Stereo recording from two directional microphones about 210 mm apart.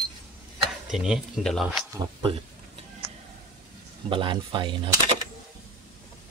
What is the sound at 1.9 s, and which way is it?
Speech, 25° right (ahead or behind).